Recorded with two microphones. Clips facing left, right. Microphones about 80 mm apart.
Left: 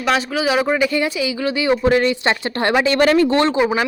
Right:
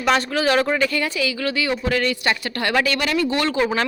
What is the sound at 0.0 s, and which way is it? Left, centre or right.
A woman's voice, centre.